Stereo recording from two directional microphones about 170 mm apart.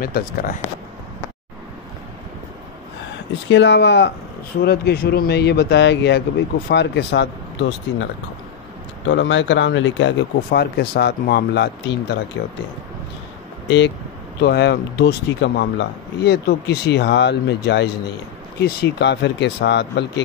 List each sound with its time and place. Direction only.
0.0 s speech: 55° left (ahead or behind)
3.4 s speech: 90° left
4.6 s a man's voice: 65° left (ahead or behind); by 7.2 s 85° left
9.1 s speech: 90° left
13.7 s speech: 90° left
14.4 s a man's voice: 70° left (ahead or behind); by 20.2 s 90° left